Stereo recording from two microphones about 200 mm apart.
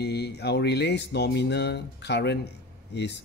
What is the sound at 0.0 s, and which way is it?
Speech, 55° left (ahead or behind).